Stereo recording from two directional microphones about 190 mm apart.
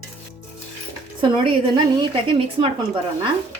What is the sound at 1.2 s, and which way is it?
Speech, 25° right (ahead or behind).